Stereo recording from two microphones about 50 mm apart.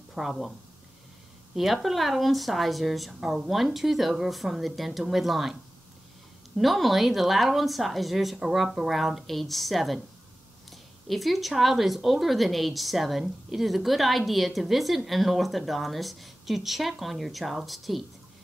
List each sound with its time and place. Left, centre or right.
0.1 s speech: centre
1.5 s speech: centre